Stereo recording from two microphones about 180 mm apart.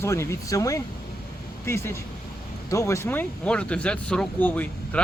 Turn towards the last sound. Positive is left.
turn(degrees=10)  # may be behind; listen again after turning